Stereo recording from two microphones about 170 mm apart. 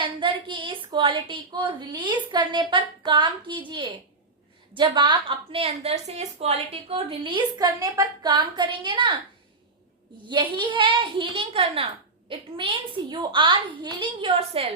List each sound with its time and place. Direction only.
0.0 s a woman's voice: 30° right (ahead or behind)
10.2 s a woman's voice: 25° right (ahead or behind)